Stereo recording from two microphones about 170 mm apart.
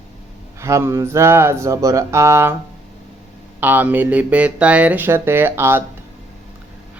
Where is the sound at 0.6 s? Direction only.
15° right (ahead or behind).